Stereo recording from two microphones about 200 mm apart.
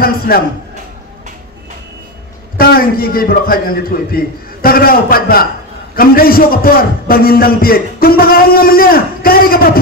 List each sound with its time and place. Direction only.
2.5 s a man's voice: 50° left (ahead or behind)